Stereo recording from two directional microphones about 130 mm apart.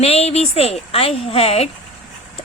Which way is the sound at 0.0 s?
55° left (ahead or behind).